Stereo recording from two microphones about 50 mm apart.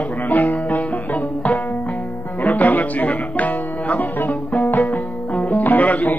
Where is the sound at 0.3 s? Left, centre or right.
Left.